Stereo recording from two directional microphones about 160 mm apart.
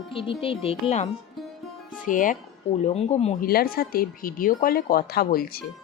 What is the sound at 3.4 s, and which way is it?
A woman's voice, 65° left (ahead or behind).